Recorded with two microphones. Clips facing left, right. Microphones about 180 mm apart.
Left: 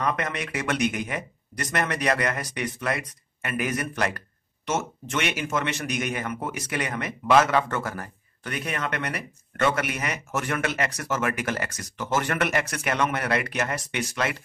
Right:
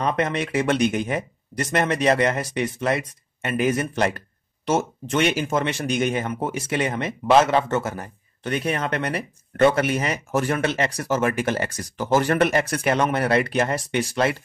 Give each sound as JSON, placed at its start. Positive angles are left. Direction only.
{"t": 0.0, "sound": "speech", "side_deg": -30}